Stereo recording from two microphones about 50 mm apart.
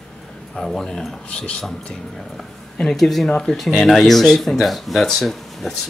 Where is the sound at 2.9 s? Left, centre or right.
Centre.